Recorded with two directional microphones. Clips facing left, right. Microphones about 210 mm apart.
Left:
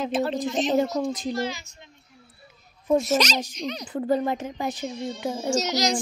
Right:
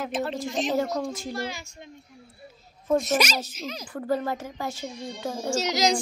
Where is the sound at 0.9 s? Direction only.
20° left (ahead or behind).